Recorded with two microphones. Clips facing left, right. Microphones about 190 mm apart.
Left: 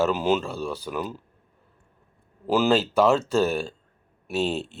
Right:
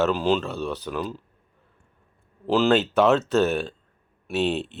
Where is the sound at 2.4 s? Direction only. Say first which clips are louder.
Right 1 dB; 5° left (ahead or behind).